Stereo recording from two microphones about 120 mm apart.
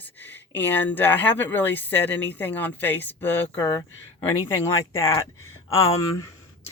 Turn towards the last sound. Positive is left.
turn(degrees=25)  # may be behind; listen again after turning